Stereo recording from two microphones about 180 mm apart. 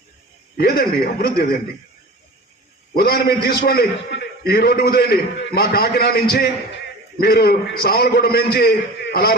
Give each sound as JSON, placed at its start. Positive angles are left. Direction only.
{"t": 0.5, "sound": "a man's voice", "side_deg": 60}
{"t": 2.9, "sound": "a man's voice", "side_deg": 55}